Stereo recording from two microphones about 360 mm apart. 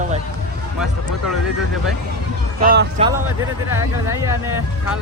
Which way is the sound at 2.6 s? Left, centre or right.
Right.